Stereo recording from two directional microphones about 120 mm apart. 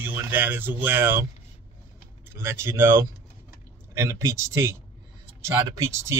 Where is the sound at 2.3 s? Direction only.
20° right (ahead or behind).